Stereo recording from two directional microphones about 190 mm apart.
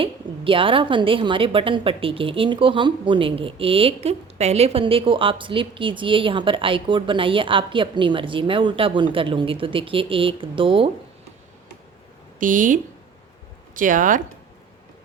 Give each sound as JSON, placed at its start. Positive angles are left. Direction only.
{"t": 0.0, "sound": "a woman's voice", "side_deg": -30}
{"t": 12.4, "sound": "speech", "side_deg": -45}